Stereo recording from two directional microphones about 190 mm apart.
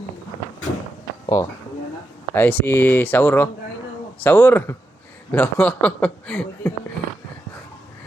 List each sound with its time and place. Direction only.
1.3 s speech: 15° left (ahead or behind)